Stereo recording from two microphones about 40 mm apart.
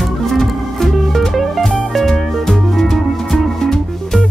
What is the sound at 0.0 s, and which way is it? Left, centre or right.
Music, centre.